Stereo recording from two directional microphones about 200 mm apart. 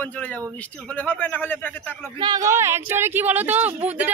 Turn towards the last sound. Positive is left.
turn(degrees=-10)  # may be behind; listen again after turning